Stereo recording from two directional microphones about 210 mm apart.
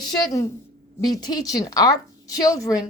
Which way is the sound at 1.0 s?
20° left (ahead or behind).